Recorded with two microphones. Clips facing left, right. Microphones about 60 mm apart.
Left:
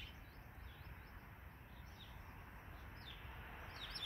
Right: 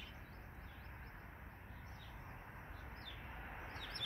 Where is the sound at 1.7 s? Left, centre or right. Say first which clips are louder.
Right 4 dB; right.